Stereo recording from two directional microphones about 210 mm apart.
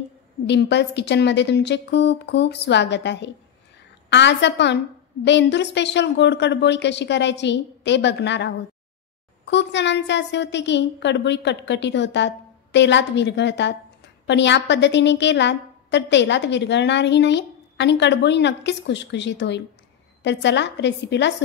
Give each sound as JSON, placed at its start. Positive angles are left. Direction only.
{"t": 0.5, "sound": "a woman's voice", "side_deg": 55}